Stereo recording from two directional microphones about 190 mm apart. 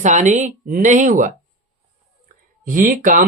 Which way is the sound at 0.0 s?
40° right (ahead or behind).